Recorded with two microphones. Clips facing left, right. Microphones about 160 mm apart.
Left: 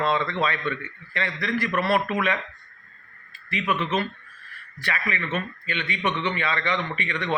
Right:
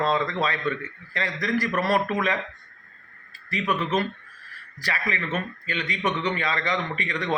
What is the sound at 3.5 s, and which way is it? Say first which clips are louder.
Speech: even; 40° right (ahead or behind).